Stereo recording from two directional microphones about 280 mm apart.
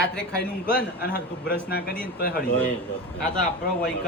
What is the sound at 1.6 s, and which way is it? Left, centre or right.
Speech, left.